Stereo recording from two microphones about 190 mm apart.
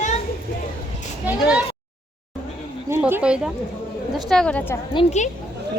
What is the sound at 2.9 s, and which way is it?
A woman's voice, 10° right (ahead or behind).